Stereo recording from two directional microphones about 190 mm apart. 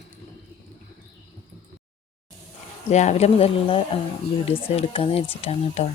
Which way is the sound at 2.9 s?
40° left (ahead or behind).